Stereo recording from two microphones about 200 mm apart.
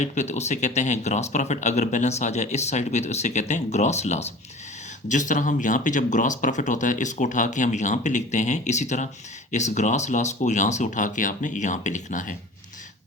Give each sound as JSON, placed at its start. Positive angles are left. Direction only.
{"t": 0.0, "sound": "speech", "side_deg": 35}